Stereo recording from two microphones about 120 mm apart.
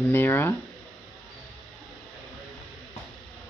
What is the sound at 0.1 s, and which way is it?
Speech, 20° left (ahead or behind).